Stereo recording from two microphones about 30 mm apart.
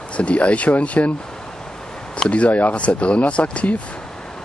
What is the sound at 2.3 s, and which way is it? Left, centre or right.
Speech, left.